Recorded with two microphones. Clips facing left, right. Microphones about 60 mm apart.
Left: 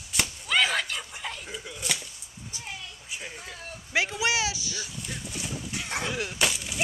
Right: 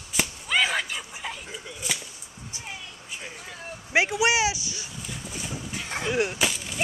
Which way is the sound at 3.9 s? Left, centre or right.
Centre.